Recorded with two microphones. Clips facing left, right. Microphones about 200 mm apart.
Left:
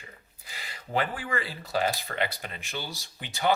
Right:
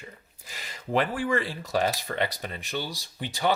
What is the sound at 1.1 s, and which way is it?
Speech, 45° right (ahead or behind).